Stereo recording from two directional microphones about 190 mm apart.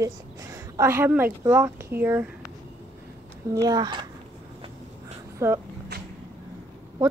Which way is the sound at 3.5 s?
20° right (ahead or behind).